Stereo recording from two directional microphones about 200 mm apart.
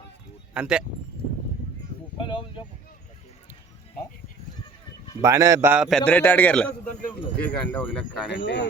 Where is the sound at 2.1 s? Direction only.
25° left (ahead or behind).